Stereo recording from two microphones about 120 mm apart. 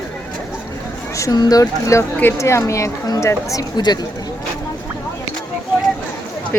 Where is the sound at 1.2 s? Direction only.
30° left (ahead or behind).